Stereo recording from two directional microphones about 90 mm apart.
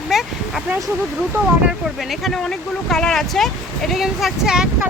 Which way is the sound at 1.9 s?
Centre (ahead or behind).